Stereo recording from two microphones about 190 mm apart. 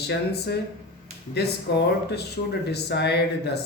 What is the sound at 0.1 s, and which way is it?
Speech, 60° left (ahead or behind).